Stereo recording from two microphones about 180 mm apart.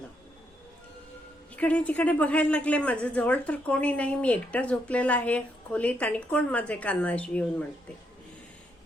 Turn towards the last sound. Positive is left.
turn(degrees=5)  # may be behind; listen again after turning